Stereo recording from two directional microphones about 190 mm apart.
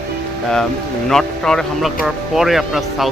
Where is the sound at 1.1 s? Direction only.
Centre (ahead or behind).